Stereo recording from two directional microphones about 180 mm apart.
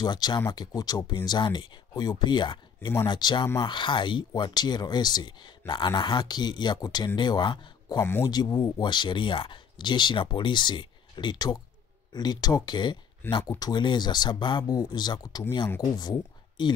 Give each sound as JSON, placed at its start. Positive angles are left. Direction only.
{"t": 0.0, "sound": "speech", "side_deg": 25}